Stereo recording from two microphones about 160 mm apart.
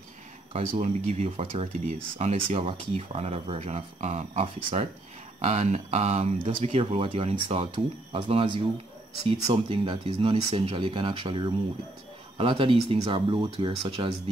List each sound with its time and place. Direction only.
0.5 s speech: 45° right (ahead or behind)